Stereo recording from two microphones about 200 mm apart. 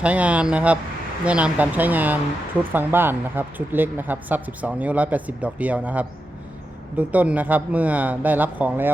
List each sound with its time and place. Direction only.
0.0 s speech: 5° right (ahead or behind)